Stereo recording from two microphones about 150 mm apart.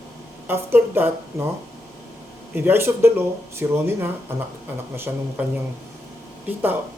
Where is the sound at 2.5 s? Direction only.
15° right (ahead or behind).